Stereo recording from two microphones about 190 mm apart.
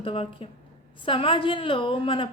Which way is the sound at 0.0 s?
30° left (ahead or behind).